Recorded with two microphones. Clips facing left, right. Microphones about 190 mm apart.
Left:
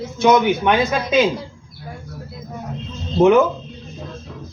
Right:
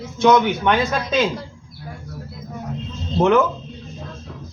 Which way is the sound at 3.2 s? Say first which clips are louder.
Left 3 dB; 10° left (ahead or behind).